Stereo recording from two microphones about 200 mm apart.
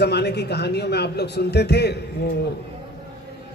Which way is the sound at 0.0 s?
55° left (ahead or behind).